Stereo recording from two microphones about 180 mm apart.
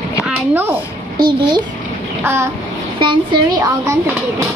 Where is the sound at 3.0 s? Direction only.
25° right (ahead or behind).